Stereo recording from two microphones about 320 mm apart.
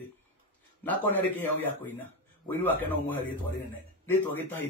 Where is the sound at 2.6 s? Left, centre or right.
Centre.